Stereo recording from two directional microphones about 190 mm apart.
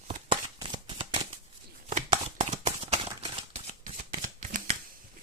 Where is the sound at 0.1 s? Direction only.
25° right (ahead or behind).